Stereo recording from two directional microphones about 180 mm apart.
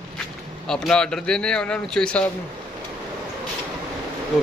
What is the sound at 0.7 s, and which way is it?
A man's voice, 5° left (ahead or behind).